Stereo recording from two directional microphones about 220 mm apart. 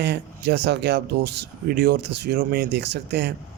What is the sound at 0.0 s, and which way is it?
Speech, 50° right (ahead or behind).